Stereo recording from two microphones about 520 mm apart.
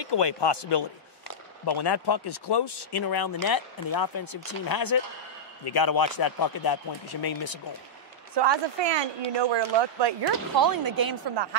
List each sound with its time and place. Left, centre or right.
0.0 s speech: left
8.4 s speech: right
10.5 s speech: right